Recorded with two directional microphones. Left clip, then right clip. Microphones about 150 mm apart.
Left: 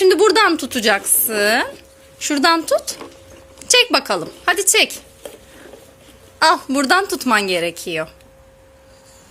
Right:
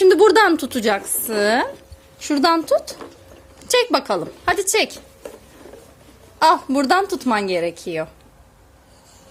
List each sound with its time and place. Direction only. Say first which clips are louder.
0.0 s a woman's voice: even; 20° right (ahead or behind)
3.6 s a sound: left 4 dB; 10° right (ahead or behind)
3.9 s a woman's voice: left 2 dB; 10° right (ahead or behind)
6.4 s a woman's voice: left 1 dB; 10° right (ahead or behind)